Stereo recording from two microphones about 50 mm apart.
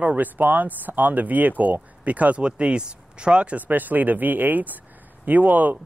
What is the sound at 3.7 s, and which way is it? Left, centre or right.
Speech, right.